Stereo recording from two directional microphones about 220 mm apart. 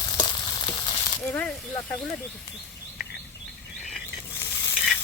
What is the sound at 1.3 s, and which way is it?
Speech, 5° left (ahead or behind).